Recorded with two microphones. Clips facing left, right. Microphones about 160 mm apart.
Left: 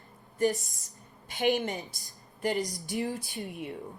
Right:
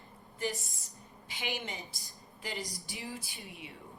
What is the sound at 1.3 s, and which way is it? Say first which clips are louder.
Speech: left 12 dB; 45° left (ahead or behind).